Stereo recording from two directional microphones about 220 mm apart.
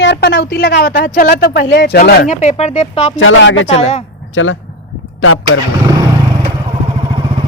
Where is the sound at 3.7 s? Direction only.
30° left (ahead or behind).